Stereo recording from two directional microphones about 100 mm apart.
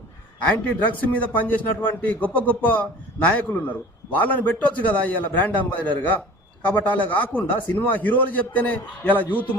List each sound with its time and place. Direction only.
0.5 s a man's voice: 15° left (ahead or behind)